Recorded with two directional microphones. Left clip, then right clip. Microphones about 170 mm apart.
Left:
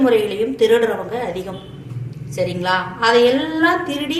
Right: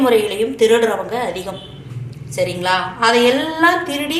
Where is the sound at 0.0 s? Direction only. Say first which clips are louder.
Right 1 dB; 25° left (ahead or behind).